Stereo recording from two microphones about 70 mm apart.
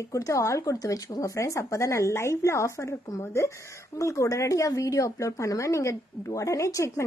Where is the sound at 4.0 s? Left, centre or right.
Left.